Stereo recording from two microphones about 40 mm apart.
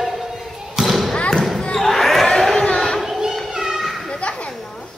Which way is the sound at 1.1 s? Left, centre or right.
Left.